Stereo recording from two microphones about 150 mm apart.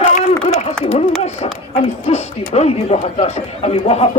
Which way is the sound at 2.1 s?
45° left (ahead or behind).